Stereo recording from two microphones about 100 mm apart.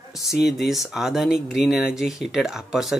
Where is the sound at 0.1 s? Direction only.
Centre (ahead or behind).